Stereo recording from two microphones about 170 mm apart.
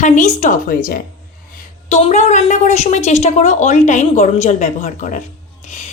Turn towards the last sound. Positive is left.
turn(degrees=45)  # may be behind; listen again after turning